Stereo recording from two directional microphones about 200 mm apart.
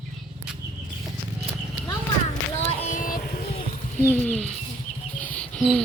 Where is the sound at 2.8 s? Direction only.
40° left (ahead or behind).